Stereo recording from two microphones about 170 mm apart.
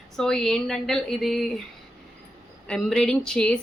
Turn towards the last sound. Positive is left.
turn(degrees=5)  # may be behind; listen again after turning